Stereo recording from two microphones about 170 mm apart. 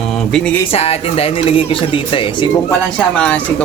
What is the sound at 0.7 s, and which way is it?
Speech, 35° left (ahead or behind).